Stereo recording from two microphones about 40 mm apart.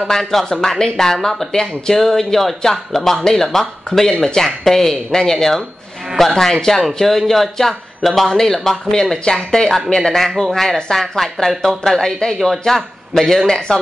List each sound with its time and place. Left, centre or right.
0.0 s a man's voice: centre
13.5 s speech: centre